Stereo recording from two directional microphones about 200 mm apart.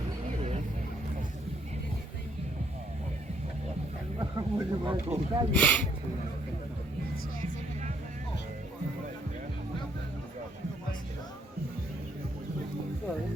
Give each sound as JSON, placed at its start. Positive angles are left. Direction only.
{"t": 4.2, "sound": "speech", "side_deg": -15}
{"t": 5.5, "sound": "speech", "side_deg": 5}